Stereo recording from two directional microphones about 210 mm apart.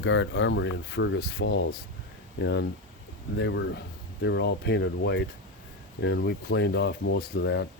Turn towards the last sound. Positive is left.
turn(degrees=55)  # may be behind; listen again after turning